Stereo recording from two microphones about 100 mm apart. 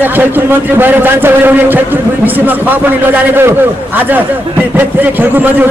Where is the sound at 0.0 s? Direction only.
20° right (ahead or behind).